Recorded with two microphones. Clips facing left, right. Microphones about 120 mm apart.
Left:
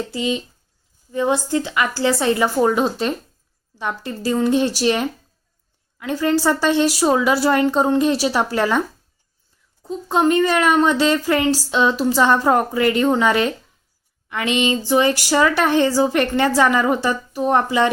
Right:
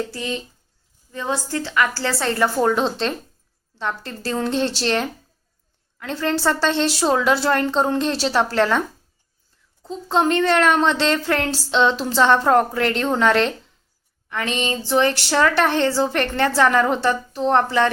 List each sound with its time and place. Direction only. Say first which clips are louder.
0.1 s a woman's voice: left 5 dB; 15° left (ahead or behind)
9.8 s a woman's voice: left 2 dB; 5° left (ahead or behind)